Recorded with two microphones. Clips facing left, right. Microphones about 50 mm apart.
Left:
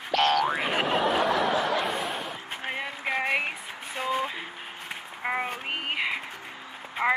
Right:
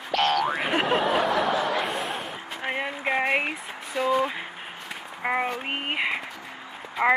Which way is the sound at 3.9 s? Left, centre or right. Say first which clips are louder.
Right 5 dB; left.